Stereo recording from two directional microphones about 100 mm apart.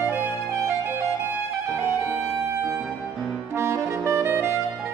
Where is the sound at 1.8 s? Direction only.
25° right (ahead or behind).